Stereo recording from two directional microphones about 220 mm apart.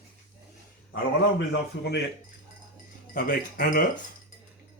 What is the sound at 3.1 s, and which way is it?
Speech, 40° left (ahead or behind).